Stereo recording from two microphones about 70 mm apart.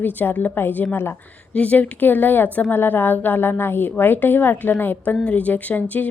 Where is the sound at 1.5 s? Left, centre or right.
Centre.